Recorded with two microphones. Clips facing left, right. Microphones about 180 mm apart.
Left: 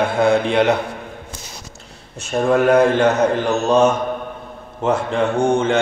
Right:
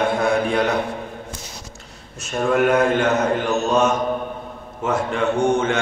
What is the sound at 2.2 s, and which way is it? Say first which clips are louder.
A man's voice: left 3 dB; 35° left (ahead or behind).